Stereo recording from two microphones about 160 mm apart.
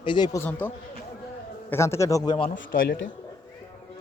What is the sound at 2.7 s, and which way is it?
Speech, 60° left (ahead or behind).